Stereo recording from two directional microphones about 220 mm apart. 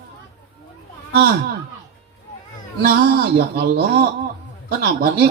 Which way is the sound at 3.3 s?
50° right (ahead or behind).